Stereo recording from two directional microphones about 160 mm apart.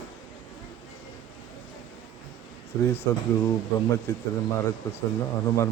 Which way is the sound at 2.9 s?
15° left (ahead or behind).